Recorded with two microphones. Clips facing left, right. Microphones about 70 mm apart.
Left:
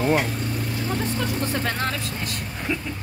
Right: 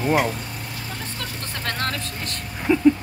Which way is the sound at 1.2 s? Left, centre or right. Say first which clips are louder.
Left 7 dB; centre.